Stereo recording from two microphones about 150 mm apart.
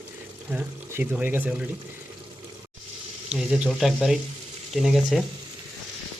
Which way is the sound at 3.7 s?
Centre (ahead or behind).